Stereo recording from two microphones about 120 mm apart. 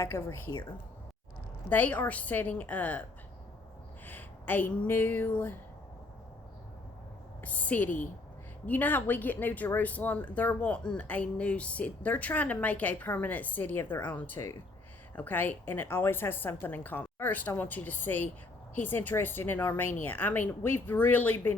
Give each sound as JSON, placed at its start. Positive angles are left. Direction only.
{"t": 0.0, "sound": "a woman's voice", "side_deg": 25}
{"t": 1.7, "sound": "speech", "side_deg": 15}
{"t": 7.4, "sound": "speech", "side_deg": 15}